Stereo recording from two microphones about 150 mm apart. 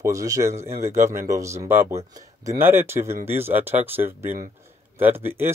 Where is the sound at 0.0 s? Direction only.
20° right (ahead or behind).